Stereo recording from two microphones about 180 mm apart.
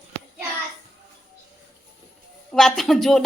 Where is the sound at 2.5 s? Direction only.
Centre (ahead or behind).